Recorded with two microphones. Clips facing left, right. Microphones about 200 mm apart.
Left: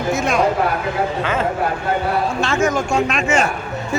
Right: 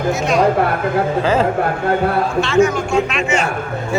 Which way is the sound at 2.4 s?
45° left (ahead or behind).